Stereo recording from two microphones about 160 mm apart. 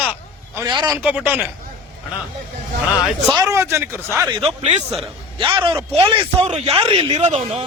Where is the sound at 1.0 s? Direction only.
10° right (ahead or behind).